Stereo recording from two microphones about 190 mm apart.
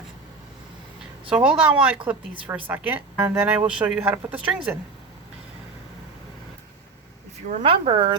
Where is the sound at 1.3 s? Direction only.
5° right (ahead or behind).